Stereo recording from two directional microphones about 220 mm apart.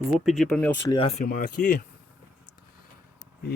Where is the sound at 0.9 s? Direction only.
25° left (ahead or behind).